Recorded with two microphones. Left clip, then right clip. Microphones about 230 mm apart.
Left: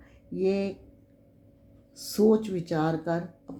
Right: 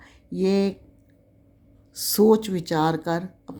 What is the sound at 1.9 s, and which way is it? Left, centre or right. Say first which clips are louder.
Speech: right 5 dB; right.